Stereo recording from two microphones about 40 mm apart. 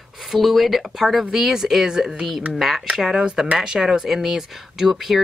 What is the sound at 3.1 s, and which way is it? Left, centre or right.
Speech, centre.